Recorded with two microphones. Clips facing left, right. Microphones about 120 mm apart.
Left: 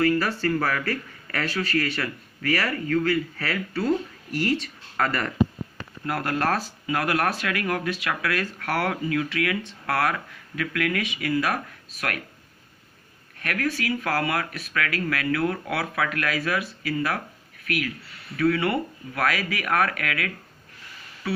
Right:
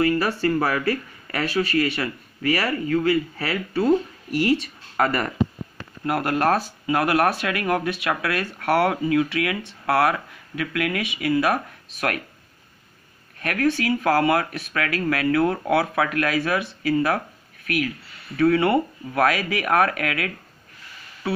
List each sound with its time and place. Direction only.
0.0 s speech: 15° right (ahead or behind)
13.4 s speech: 25° right (ahead or behind)